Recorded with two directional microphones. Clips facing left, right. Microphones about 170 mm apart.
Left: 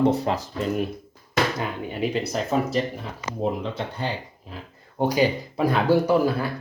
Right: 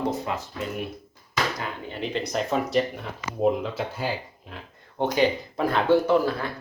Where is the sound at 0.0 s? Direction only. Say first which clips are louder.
Left 7 dB; 30° left (ahead or behind).